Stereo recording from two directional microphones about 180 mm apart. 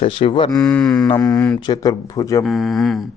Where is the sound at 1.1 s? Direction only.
15° left (ahead or behind).